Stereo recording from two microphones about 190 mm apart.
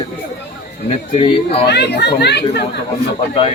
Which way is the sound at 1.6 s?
65° left (ahead or behind).